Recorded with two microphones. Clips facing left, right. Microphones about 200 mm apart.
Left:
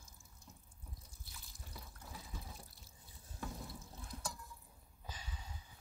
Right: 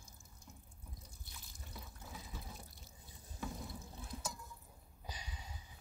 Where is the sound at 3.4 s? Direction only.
Centre (ahead or behind).